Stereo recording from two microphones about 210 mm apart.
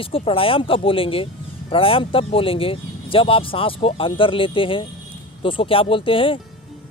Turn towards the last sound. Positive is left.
turn(degrees=25)  # may be behind; listen again after turning